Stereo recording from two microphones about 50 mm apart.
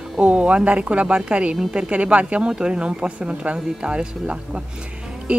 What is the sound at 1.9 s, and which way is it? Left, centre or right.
Speech, right.